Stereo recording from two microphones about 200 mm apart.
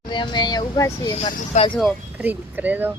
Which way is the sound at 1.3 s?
35° left (ahead or behind).